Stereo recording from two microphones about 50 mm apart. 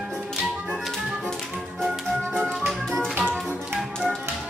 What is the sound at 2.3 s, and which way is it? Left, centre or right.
Music, centre.